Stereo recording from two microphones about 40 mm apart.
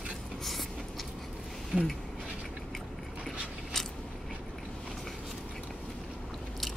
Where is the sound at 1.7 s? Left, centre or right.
Centre.